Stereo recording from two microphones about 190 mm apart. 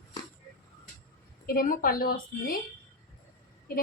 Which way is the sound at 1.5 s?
50° left (ahead or behind).